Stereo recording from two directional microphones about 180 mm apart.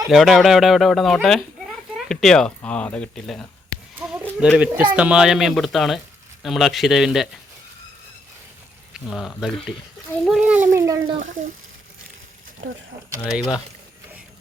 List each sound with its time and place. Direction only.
0.1 s speech: centre (ahead or behind)
3.9 s a sound: 10° right (ahead or behind)
4.5 s speech: 5° right (ahead or behind)
8.9 s speech: centre (ahead or behind)
10.2 s a sound: 5° right (ahead or behind); by 11.2 s 20° right (ahead or behind)
11.2 s speech: 45° right (ahead or behind)
13.2 s speech: centre (ahead or behind)